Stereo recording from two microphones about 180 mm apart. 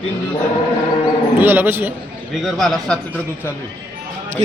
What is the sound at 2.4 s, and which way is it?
Speech, centre (ahead or behind).